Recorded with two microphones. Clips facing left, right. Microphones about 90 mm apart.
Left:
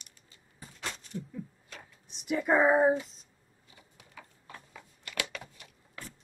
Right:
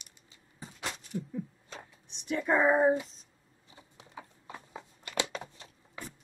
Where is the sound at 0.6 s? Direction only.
15° right (ahead or behind).